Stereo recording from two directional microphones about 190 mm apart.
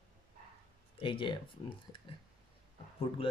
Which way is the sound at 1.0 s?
25° left (ahead or behind).